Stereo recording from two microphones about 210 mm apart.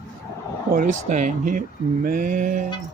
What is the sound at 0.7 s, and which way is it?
Speech, 40° right (ahead or behind).